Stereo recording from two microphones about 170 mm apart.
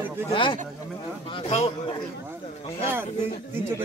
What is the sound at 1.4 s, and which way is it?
Speech, 40° left (ahead or behind).